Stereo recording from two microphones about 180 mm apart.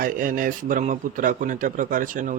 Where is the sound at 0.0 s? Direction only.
50° right (ahead or behind).